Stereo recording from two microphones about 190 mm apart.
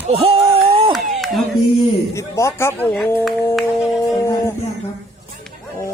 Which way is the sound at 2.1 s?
15° left (ahead or behind).